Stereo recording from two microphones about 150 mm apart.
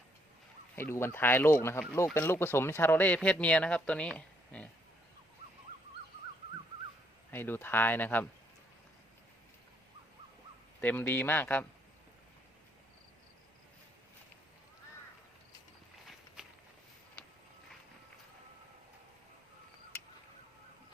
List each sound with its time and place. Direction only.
0.8 s speech: 15° left (ahead or behind)
7.3 s speech: 15° left (ahead or behind)
10.8 s speech: 10° left (ahead or behind)
16.0 s walk: 5° right (ahead or behind)